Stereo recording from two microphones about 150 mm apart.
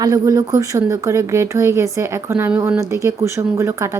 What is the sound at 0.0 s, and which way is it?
Speech, 25° right (ahead or behind).